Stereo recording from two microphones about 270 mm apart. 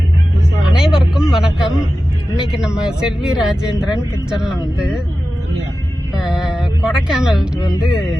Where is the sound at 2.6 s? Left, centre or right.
Centre.